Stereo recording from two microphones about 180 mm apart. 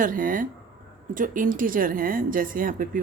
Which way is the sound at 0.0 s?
50° right (ahead or behind).